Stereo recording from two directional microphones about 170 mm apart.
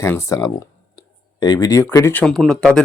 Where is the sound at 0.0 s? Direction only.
15° left (ahead or behind).